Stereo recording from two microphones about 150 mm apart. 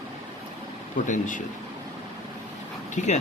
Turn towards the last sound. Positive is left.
turn(degrees=50)  # may be behind; listen again after turning